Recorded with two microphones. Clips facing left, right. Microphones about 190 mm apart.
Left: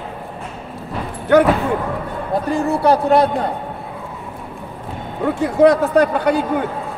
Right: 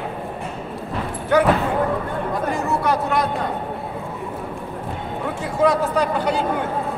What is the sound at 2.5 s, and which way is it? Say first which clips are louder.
Speech: left 8 dB; 30° left (ahead or behind).